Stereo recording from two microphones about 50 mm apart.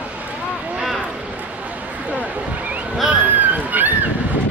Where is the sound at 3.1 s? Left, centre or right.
Right.